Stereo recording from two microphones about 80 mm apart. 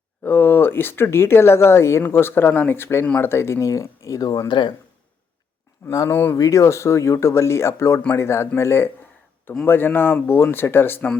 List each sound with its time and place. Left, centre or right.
0.2 s speech: left
6.1 s speech: left
6.3 s speech: left